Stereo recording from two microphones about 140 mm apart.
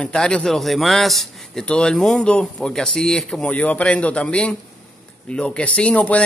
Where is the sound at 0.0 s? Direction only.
5° left (ahead or behind).